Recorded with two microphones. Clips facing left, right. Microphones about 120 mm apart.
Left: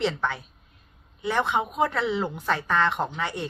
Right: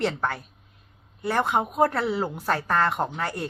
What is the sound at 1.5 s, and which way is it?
A woman's voice, 45° right (ahead or behind).